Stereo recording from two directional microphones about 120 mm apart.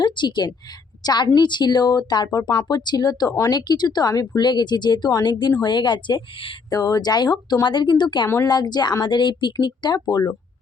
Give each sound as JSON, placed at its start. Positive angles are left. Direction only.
{"t": 0.0, "sound": "a woman's voice", "side_deg": 40}
{"t": 6.7, "sound": "speech", "side_deg": 30}